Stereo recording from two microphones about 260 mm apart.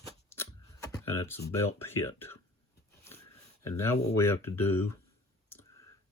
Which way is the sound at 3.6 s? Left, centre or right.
Centre.